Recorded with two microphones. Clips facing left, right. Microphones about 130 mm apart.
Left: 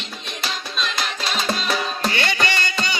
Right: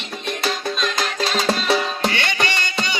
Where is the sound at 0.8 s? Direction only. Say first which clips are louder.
Right 3 dB; 40° right (ahead or behind).